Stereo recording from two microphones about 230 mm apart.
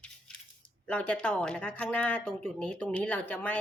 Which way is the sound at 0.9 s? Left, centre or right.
Centre.